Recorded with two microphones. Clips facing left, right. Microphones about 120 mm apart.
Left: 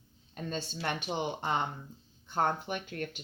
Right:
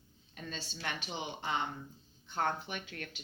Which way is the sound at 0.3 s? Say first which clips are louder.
Left 7 dB; 50° left (ahead or behind).